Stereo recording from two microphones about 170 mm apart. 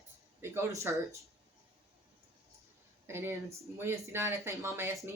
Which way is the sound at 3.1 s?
15° right (ahead or behind).